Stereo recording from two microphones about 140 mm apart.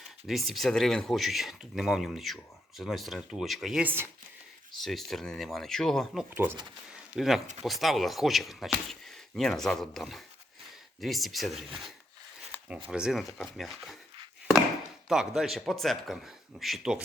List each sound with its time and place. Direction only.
0.3 s speech: centre (ahead or behind)
4.8 s speech: centre (ahead or behind)
6.3 s speech: 15° right (ahead or behind)
6.9 s a sound: 5° right (ahead or behind)
7.6 s speech: centre (ahead or behind)
12.5 s a sound: 5° right (ahead or behind)
12.9 s speech: 5° right (ahead or behind)
15.1 s speech: centre (ahead or behind)